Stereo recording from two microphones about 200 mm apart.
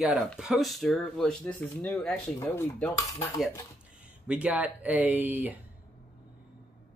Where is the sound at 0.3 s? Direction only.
Centre (ahead or behind).